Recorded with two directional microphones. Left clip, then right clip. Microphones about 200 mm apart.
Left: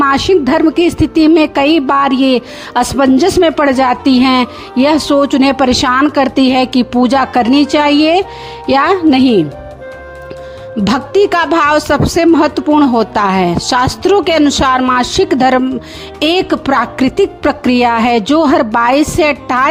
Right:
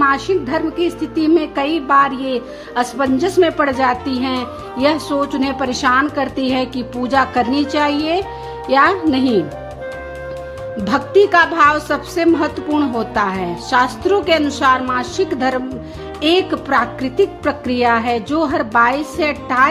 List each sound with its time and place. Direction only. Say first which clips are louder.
0.0 s a woman's voice: left 5 dB; 45° left (ahead or behind)
10.8 s a woman's voice: left 2 dB; 45° left (ahead or behind)